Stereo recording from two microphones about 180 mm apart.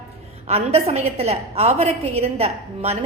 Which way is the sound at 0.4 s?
35° right (ahead or behind).